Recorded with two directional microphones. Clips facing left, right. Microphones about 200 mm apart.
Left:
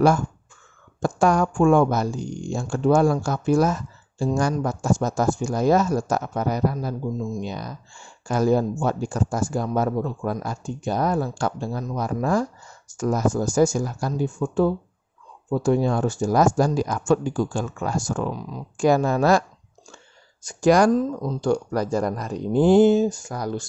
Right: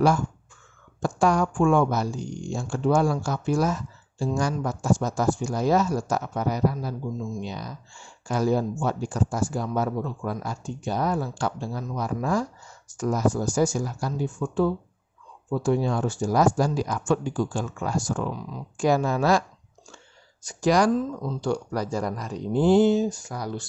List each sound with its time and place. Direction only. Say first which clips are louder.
1.0 s speech: left 2 dB; 50° left (ahead or behind)
20.4 s speech: left 4 dB; 50° left (ahead or behind)